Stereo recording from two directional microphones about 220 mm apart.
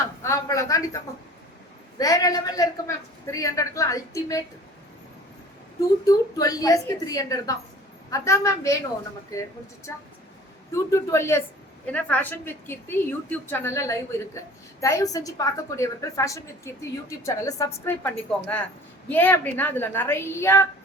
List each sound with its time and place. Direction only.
0.2 s a sound: 15° left (ahead or behind)
2.0 s a woman's voice: 15° left (ahead or behind)
6.1 s a woman's voice: 15° left (ahead or behind)
10.9 s a woman's voice: 10° left (ahead or behind)